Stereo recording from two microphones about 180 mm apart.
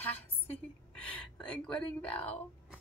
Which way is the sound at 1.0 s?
5° left (ahead or behind).